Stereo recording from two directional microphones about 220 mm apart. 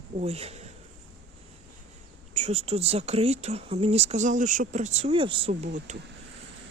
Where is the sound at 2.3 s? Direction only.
30° right (ahead or behind).